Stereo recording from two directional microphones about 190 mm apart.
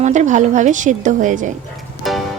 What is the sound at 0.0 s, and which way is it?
A woman's voice, 40° right (ahead or behind).